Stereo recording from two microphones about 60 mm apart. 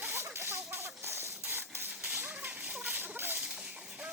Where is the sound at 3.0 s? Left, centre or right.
Right.